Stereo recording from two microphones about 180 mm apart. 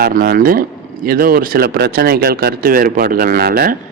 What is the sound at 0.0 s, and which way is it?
Speech, 55° right (ahead or behind).